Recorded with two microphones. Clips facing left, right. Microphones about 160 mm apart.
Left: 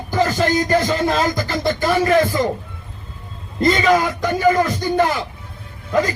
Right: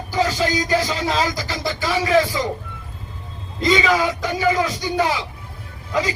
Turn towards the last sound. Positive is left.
turn(degrees=50)  # may be behind; listen again after turning